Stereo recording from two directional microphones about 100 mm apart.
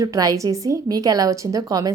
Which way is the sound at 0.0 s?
35° right (ahead or behind).